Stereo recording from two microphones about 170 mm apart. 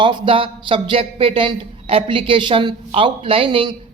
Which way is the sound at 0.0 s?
30° right (ahead or behind).